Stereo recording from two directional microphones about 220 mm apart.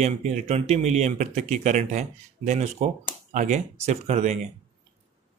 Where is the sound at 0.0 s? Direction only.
30° right (ahead or behind).